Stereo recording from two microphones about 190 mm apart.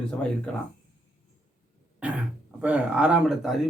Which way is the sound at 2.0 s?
5° right (ahead or behind).